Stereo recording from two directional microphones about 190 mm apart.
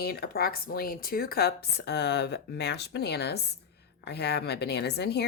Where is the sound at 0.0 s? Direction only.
55° left (ahead or behind).